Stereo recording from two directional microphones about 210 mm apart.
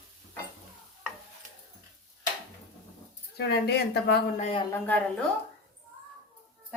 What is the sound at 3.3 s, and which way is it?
Speech, 50° left (ahead or behind).